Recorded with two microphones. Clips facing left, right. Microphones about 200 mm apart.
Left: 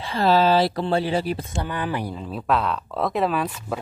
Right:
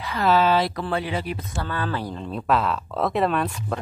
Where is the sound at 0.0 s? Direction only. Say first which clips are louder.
Left 1 dB; 30° left (ahead or behind).